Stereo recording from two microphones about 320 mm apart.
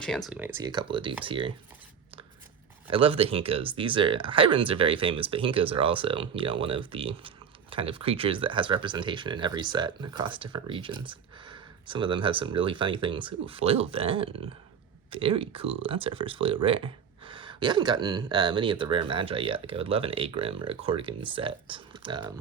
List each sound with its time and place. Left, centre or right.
0.3 s speech: centre
2.8 s speech: centre